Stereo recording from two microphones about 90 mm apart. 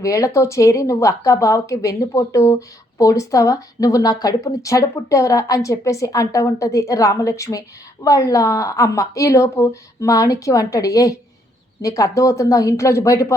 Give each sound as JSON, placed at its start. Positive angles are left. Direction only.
{"t": 0.0, "sound": "speech", "side_deg": 35}